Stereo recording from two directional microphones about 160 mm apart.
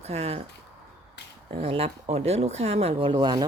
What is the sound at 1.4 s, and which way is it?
Speech, 40° right (ahead or behind).